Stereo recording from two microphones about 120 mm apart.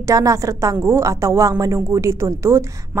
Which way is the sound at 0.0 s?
30° right (ahead or behind).